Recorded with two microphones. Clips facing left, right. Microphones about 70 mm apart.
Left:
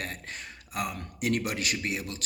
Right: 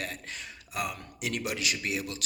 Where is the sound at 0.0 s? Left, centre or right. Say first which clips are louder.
Even; left.